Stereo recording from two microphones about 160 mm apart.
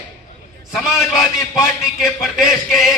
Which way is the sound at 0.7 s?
Centre (ahead or behind).